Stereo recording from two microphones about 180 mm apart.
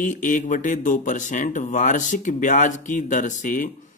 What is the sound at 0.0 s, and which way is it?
A man's voice, 45° left (ahead or behind).